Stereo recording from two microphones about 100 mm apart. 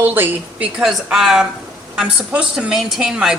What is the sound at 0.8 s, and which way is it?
Chopping, 5° right (ahead or behind).